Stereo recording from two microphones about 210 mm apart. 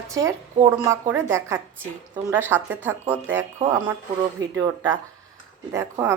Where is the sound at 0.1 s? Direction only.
15° right (ahead or behind).